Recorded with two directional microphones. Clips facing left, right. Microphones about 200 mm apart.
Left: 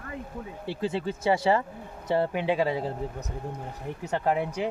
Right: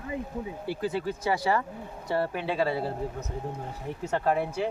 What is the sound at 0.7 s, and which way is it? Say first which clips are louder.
Speech: left 1 dB; 25° left (ahead or behind).